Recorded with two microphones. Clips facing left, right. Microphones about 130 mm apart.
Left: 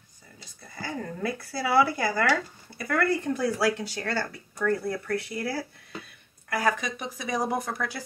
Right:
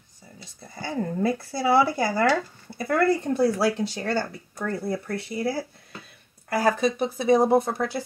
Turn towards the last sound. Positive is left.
turn(degrees=-25)  # may be behind; listen again after turning